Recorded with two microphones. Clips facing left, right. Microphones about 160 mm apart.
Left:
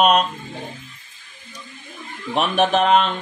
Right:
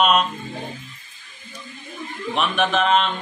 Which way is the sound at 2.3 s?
40° left (ahead or behind).